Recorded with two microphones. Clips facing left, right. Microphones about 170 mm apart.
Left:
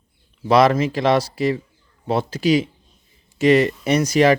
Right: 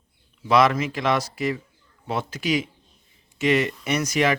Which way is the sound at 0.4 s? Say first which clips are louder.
Left 4 dB; 35° left (ahead or behind).